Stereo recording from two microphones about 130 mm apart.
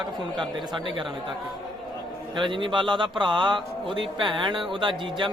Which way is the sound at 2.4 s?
40° right (ahead or behind).